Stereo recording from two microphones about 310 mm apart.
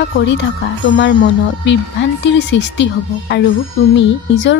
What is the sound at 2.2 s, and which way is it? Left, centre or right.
Speech, left.